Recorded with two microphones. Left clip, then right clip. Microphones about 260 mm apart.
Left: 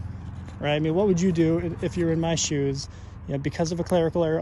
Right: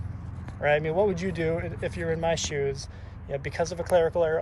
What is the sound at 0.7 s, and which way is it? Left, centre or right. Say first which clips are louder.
Speech: left 1 dB; centre.